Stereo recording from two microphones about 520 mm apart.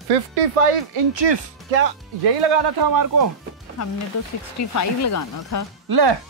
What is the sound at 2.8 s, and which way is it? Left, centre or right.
Speech, right.